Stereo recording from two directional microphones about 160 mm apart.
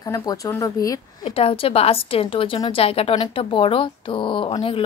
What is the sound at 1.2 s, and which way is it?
A woman's voice, 35° left (ahead or behind).